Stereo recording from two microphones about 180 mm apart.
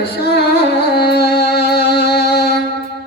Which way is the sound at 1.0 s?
65° left (ahead or behind).